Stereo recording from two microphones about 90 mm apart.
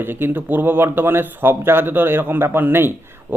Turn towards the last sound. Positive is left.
turn(degrees=-25)  # may be behind; listen again after turning